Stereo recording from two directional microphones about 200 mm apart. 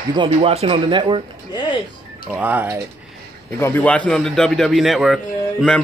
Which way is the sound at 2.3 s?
10° right (ahead or behind).